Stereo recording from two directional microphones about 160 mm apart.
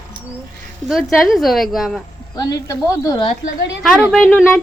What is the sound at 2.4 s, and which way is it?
Speech, 25° left (ahead or behind).